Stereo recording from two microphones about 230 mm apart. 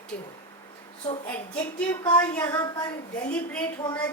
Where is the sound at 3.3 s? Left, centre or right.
Centre.